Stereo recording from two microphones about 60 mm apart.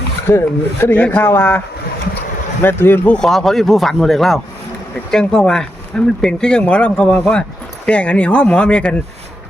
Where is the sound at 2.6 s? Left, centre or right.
Left.